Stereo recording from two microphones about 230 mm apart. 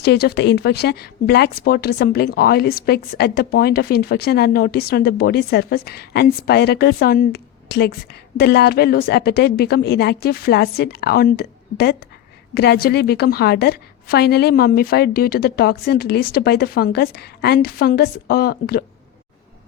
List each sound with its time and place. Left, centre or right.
0.0 s speech: left